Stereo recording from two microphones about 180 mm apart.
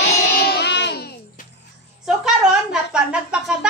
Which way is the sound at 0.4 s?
65° left (ahead or behind).